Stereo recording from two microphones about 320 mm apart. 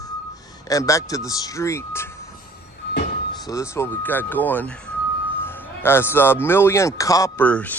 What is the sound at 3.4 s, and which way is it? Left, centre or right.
Speech, centre.